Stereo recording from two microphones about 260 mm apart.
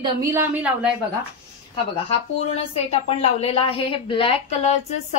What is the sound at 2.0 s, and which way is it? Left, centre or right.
A woman's voice, left.